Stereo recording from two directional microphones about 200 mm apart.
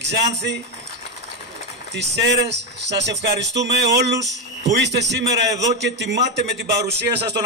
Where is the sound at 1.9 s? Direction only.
60° right (ahead or behind).